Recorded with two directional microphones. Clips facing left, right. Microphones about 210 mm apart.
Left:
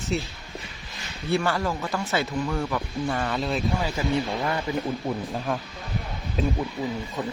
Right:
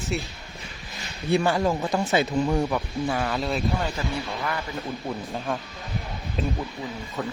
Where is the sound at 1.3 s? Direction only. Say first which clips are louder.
Right 3 dB; 15° right (ahead or behind).